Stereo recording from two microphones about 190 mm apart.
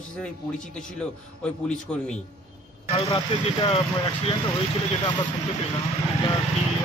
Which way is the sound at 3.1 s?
25° left (ahead or behind).